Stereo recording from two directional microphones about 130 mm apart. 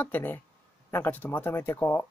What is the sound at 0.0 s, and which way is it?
Speech, 15° left (ahead or behind).